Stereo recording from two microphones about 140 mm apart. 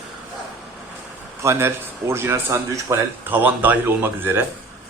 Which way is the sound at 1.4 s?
20° right (ahead or behind).